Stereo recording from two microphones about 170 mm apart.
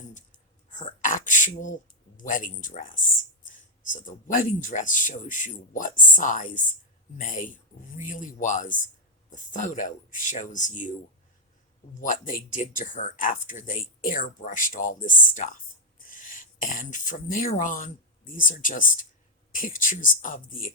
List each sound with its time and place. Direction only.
0.7 s speech: 50° left (ahead or behind)
11.9 s speech: 50° left (ahead or behind)